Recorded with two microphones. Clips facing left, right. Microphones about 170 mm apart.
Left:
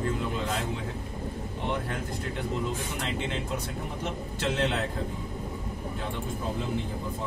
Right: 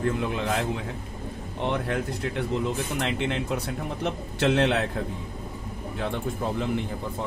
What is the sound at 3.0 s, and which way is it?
A man's voice, 65° right (ahead or behind).